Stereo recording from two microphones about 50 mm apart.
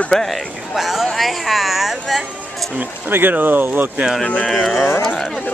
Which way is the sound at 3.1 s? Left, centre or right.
Right.